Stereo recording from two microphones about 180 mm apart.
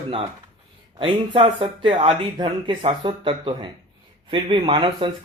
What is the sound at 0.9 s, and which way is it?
Speech, 30° right (ahead or behind).